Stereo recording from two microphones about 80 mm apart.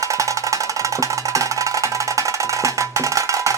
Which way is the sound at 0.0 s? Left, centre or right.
Right.